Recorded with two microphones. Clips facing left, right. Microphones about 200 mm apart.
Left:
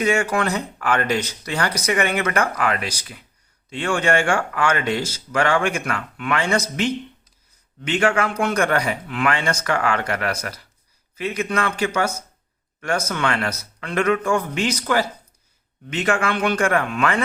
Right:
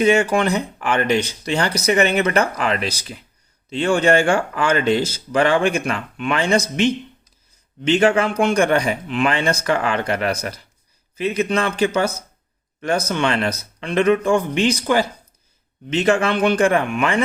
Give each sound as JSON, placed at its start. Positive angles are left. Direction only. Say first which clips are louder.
{"t": 0.0, "sound": "speech", "louder": "right 4 dB", "side_deg": -20}
{"t": 14.6, "sound": "speech", "louder": "right 3 dB", "side_deg": -15}